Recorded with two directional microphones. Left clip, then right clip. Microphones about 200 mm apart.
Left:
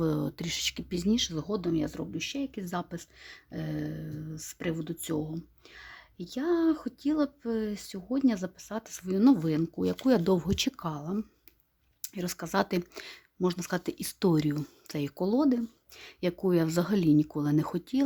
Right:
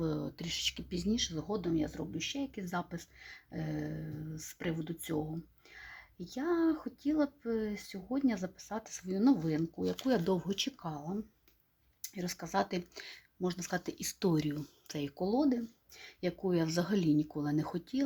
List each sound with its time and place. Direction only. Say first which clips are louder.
0.0 s speech: left 6 dB; 35° left (ahead or behind)